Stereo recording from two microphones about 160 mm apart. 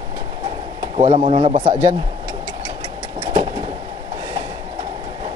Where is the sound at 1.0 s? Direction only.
40° right (ahead or behind).